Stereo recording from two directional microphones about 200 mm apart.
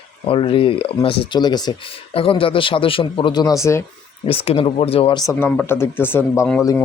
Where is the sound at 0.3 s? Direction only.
25° left (ahead or behind).